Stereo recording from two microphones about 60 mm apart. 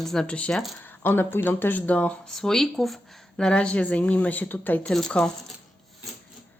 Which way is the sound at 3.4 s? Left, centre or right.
Centre.